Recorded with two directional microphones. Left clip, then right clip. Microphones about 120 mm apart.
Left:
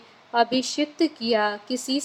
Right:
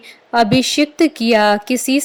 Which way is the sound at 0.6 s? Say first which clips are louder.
Right 10 dB; 55° right (ahead or behind).